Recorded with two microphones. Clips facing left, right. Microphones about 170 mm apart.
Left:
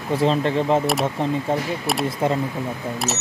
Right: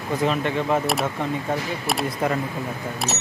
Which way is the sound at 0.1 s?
30° left (ahead or behind).